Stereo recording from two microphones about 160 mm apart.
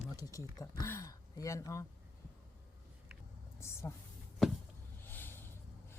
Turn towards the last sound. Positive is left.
turn(degrees=15)  # may be behind; listen again after turning